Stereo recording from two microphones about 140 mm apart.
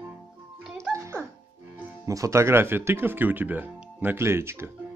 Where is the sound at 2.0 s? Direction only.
20° right (ahead or behind).